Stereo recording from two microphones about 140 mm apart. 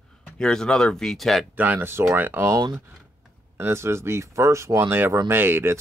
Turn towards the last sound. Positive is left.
turn(degrees=-15)  # may be behind; listen again after turning